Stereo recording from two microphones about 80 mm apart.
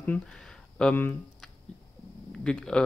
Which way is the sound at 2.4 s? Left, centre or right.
Centre.